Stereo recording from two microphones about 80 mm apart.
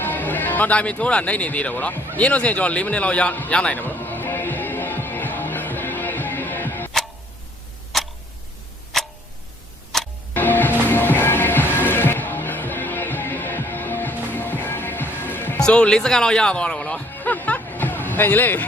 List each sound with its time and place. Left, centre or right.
0.0 s a man's voice: left
3.8 s music: left
7.9 s tick-tock: centre
9.9 s clock: centre
10.3 s music: left
15.5 s music: centre